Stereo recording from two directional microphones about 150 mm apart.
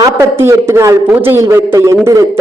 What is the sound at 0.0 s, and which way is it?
A man's voice, 20° right (ahead or behind).